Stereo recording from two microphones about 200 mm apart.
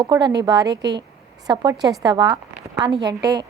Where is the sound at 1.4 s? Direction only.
20° right (ahead or behind).